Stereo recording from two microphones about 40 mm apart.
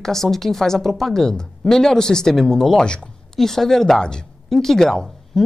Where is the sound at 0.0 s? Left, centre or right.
Centre.